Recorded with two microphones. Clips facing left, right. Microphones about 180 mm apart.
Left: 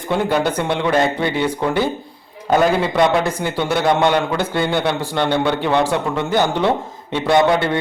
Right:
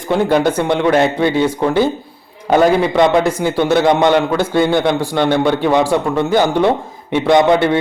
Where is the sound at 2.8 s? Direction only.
15° right (ahead or behind).